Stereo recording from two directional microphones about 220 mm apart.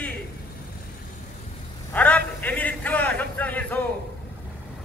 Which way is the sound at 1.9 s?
5° left (ahead or behind).